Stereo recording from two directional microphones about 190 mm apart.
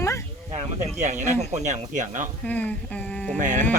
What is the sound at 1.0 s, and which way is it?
Speech, 40° right (ahead or behind).